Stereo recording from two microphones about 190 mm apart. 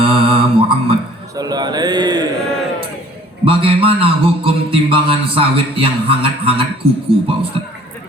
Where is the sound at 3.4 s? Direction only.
30° right (ahead or behind).